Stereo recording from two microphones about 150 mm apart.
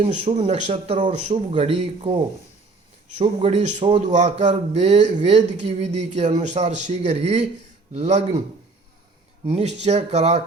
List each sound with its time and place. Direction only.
0.0 s a man's voice: 45° right (ahead or behind)
3.4 s a man's voice: 50° right (ahead or behind)
9.5 s a man's voice: 45° right (ahead or behind)